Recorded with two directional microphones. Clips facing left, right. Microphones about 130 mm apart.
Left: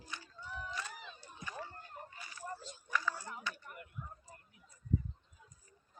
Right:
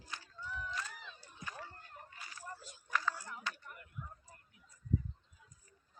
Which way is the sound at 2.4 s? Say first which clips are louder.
Left 6 dB; 20° left (ahead or behind).